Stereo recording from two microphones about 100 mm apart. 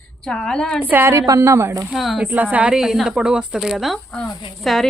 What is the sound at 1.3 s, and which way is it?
Speech, 30° right (ahead or behind).